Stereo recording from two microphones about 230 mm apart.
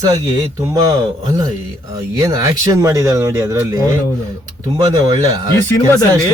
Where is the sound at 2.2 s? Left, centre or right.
Centre.